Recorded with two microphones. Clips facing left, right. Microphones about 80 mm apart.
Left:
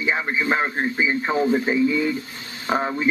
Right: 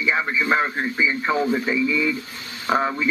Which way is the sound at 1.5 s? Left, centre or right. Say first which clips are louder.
Left 2 dB; left.